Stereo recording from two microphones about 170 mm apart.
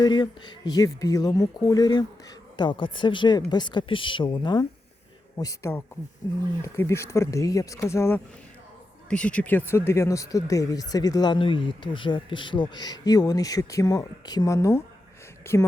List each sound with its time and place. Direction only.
0.0 s speech: 25° left (ahead or behind)